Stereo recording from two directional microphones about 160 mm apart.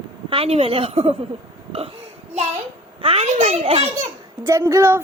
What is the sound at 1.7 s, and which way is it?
Burping, 35° right (ahead or behind).